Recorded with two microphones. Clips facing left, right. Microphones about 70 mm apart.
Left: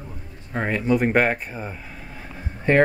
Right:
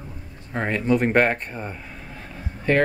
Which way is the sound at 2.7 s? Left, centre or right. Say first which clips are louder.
Left 2 dB; left.